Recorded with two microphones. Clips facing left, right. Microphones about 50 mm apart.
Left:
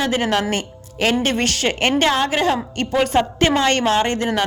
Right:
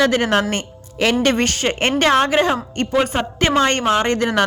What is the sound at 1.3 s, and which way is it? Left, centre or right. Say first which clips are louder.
Speech: right 2 dB; right.